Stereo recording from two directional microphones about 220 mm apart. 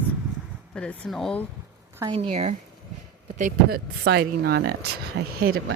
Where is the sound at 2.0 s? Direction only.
25° right (ahead or behind).